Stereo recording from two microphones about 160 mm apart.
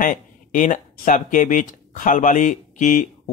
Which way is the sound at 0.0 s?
55° left (ahead or behind).